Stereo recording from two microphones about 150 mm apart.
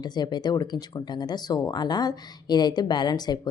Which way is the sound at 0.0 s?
30° left (ahead or behind).